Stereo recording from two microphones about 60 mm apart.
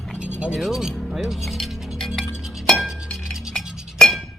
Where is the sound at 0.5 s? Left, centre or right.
Centre.